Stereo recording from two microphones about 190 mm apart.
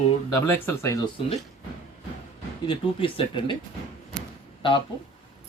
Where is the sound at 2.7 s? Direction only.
25° left (ahead or behind).